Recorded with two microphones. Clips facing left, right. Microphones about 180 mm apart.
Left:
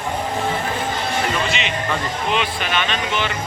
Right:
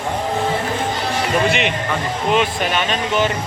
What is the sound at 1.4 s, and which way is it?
Music, 60° right (ahead or behind).